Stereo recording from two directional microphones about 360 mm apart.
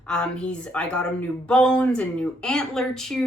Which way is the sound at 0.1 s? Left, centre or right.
Centre.